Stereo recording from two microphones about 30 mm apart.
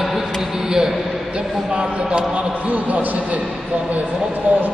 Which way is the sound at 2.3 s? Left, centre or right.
Right.